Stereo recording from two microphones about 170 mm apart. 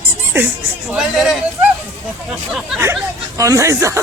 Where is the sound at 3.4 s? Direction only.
20° right (ahead or behind).